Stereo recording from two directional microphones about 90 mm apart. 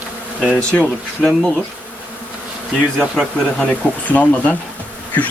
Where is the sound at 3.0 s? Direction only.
10° left (ahead or behind).